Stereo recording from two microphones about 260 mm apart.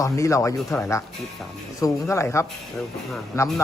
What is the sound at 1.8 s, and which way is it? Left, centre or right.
Speech, centre.